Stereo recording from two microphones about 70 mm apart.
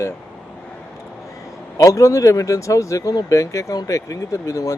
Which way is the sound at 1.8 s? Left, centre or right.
Left.